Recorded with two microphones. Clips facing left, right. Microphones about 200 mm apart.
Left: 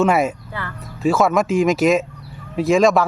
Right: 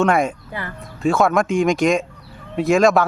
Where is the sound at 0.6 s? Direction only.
15° right (ahead or behind).